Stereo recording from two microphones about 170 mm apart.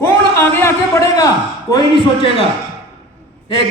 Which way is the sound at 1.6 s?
25° left (ahead or behind).